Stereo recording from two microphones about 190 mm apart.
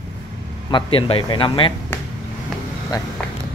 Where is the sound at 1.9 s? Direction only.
10° left (ahead or behind).